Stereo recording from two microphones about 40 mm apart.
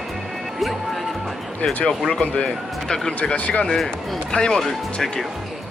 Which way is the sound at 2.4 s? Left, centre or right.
Centre.